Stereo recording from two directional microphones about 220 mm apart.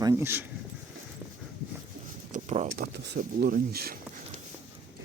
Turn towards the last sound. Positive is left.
turn(degrees=-40)  # may be behind; listen again after turning